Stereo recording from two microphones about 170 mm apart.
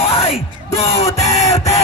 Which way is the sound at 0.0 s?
35° left (ahead or behind).